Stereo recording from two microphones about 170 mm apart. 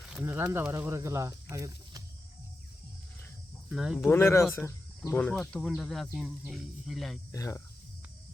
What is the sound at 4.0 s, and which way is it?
Speech, 15° left (ahead or behind).